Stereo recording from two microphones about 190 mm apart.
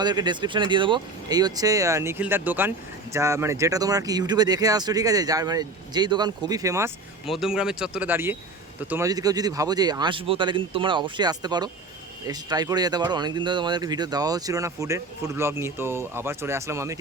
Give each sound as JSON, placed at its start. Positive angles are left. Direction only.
{"t": 0.0, "sound": "speech", "side_deg": -20}
{"t": 7.3, "sound": "speech", "side_deg": 0}